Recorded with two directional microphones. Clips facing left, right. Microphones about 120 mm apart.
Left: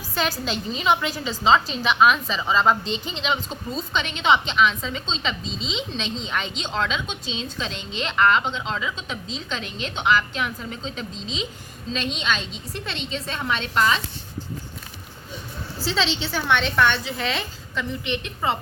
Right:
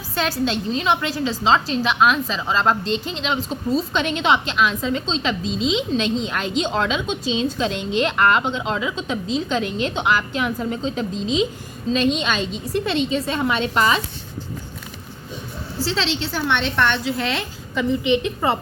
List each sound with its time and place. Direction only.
0.1 s a woman's voice: centre (ahead or behind)
15.8 s a woman's voice: centre (ahead or behind)